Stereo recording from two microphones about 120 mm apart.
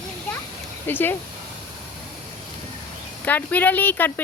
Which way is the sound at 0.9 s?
15° left (ahead or behind).